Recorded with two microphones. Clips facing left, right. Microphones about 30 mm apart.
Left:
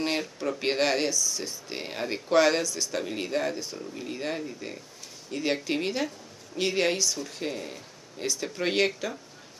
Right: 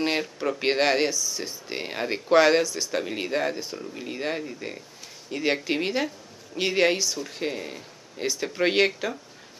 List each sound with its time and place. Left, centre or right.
0.0 s speech: centre